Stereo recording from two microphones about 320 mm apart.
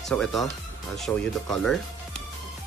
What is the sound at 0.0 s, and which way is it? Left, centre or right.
Speech, centre.